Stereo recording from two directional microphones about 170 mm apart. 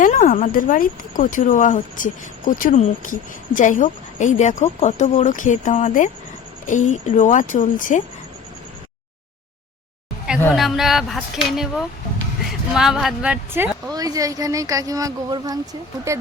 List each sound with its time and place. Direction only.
0.0 s a woman's voice: 50° left (ahead or behind)
10.5 s a woman's voice: centre (ahead or behind); by 16.2 s 15° right (ahead or behind)